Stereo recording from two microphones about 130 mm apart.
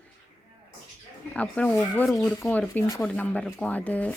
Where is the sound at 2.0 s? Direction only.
Centre (ahead or behind).